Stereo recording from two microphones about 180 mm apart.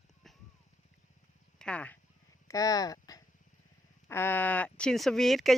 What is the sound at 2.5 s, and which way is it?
Speech, 20° left (ahead or behind).